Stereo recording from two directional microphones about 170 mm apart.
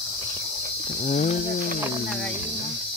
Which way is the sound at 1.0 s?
40° left (ahead or behind).